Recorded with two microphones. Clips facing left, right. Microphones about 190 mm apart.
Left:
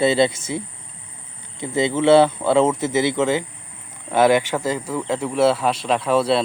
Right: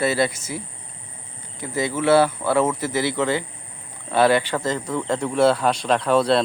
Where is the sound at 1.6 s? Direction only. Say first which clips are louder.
Left 4 dB; 25° left (ahead or behind).